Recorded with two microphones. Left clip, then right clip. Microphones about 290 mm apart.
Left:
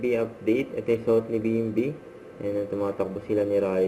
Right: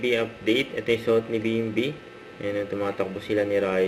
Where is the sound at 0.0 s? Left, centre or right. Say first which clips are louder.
Right 1 dB; centre.